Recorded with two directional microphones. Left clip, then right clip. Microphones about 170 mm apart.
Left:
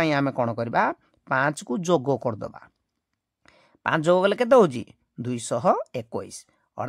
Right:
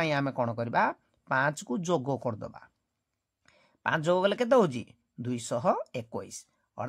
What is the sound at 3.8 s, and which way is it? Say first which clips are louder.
Speech: left 6 dB; 25° left (ahead or behind).